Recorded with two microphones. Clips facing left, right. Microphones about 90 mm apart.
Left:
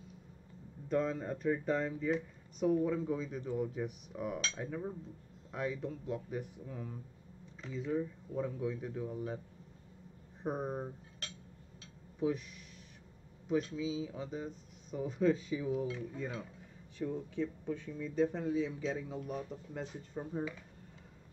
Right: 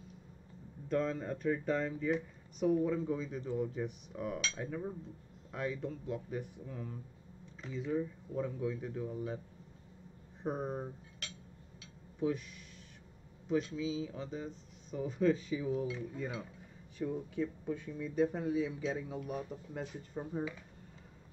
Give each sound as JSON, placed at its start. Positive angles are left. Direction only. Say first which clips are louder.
{"t": 0.8, "sound": "speech", "louder": "even", "side_deg": 5}
{"t": 10.4, "sound": "speech", "louder": "even", "side_deg": 5}
{"t": 11.2, "sound": "a sound", "louder": "even", "side_deg": 35}
{"t": 12.2, "sound": "speech", "louder": "even", "side_deg": 5}
{"t": 13.7, "sound": "speech", "louder": "even", "side_deg": 5}